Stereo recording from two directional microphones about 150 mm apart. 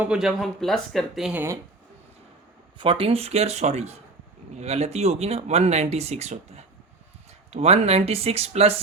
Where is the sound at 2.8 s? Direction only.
35° right (ahead or behind).